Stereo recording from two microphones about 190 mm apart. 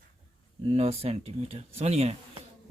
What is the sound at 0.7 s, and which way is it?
Speech, 30° right (ahead or behind).